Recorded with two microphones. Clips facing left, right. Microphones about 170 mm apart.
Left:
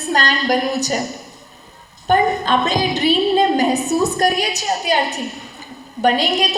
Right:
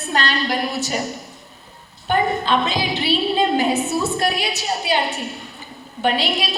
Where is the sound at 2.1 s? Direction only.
40° left (ahead or behind).